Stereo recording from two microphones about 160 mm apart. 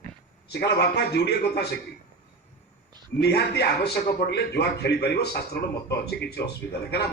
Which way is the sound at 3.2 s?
90° left.